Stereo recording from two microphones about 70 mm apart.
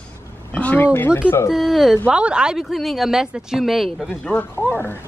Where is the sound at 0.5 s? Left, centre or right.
Left.